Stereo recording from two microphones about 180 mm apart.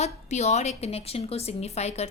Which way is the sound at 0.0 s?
40° left (ahead or behind).